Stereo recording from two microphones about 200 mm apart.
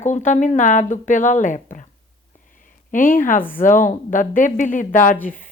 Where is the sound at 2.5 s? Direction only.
40° left (ahead or behind).